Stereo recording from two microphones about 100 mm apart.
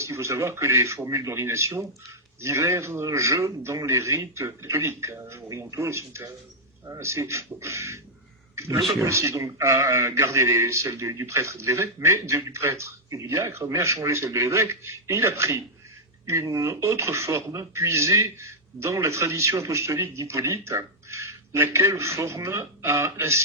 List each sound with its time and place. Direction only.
0.0 s a man's voice: 30° right (ahead or behind)